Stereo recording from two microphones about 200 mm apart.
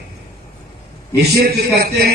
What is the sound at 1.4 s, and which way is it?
Speech, 50° right (ahead or behind).